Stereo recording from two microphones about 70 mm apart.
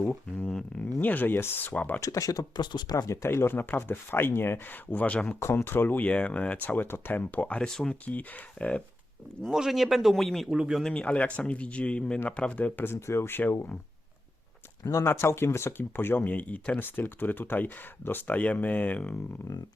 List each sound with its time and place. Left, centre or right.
0.0 s speech: left
2.0 s speech: left
3.1 s speech: left
5.4 s speech: left; by 7.7 s centre
7.7 s speech: centre
8.0 s speech: left
9.5 s a man's voice: centre
10.5 s speech: centre
10.8 s speech: centre
15.0 s speech: left